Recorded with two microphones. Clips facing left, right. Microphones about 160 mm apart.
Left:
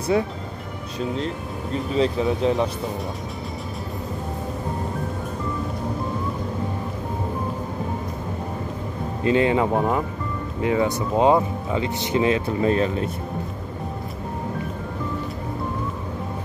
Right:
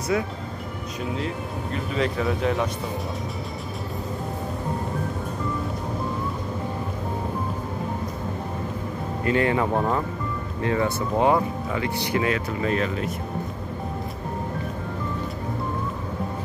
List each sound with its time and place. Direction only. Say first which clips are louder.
0.1 s speech: left 4 dB; 30° left (ahead or behind)
2.0 s speech: left 4 dB; 30° left (ahead or behind)
9.2 s speech: left 3 dB; 20° left (ahead or behind)